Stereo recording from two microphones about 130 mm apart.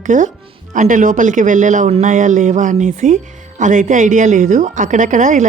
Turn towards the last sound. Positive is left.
turn(degrees=-80)